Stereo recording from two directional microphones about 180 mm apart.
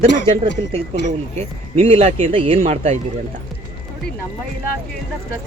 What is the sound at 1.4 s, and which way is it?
A man's voice, 35° right (ahead or behind).